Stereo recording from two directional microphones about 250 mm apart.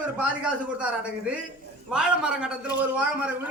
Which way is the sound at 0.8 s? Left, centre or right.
Centre.